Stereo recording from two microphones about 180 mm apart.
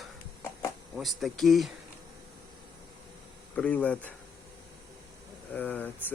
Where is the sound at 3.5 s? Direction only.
5° left (ahead or behind).